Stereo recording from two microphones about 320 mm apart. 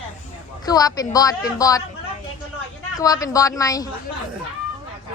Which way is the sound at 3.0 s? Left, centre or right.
Centre.